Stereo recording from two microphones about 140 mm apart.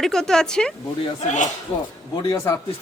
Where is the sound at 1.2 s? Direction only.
60° left (ahead or behind).